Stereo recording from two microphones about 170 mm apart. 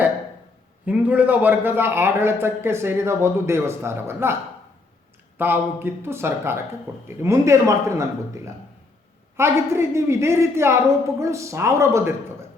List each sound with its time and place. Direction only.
0.9 s a man's voice: 10° right (ahead or behind)
5.4 s a man's voice: 10° right (ahead or behind)
9.4 s a man's voice: 15° right (ahead or behind)